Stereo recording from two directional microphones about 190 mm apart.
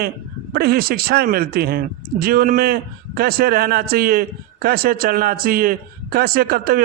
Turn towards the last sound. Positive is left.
turn(degrees=-50)  # may be behind; listen again after turning